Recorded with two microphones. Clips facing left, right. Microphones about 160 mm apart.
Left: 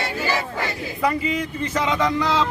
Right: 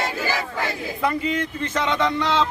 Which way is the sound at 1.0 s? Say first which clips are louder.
Left 1 dB; 5° left (ahead or behind).